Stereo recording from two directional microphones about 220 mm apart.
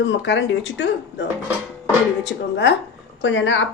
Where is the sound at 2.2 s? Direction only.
55° left (ahead or behind).